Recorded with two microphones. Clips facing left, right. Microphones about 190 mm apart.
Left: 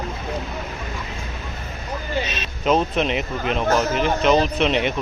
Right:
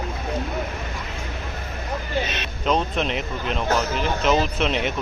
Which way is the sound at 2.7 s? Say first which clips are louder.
Left 3 dB; 5° left (ahead or behind).